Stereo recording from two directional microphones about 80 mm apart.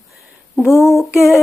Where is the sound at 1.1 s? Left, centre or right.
Centre.